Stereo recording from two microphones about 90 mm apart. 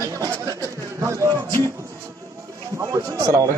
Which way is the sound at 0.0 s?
40° right (ahead or behind).